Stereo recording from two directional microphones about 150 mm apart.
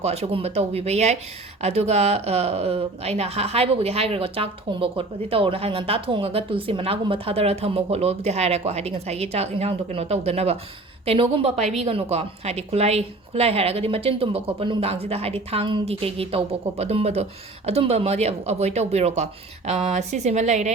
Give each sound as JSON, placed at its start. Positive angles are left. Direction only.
{"t": 0.0, "sound": "a woman's voice", "side_deg": -45}